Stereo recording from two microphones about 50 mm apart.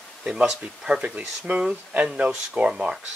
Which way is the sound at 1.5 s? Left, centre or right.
Right.